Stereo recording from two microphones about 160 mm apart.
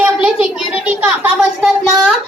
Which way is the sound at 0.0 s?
5° right (ahead or behind).